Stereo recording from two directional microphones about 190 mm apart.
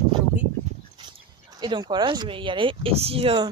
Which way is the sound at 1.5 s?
20° right (ahead or behind).